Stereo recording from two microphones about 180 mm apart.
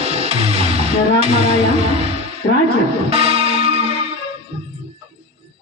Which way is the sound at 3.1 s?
35° right (ahead or behind).